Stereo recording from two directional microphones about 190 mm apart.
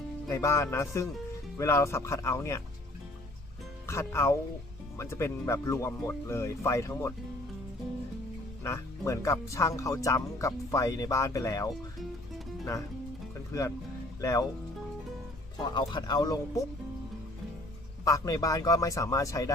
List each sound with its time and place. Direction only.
0.3 s speech: 15° left (ahead or behind)
3.8 s speech: 15° left (ahead or behind)
8.6 s speech: 15° left (ahead or behind)
13.5 s speech: 15° left (ahead or behind)
15.5 s speech: 25° left (ahead or behind)
18.0 s speech: 20° left (ahead or behind)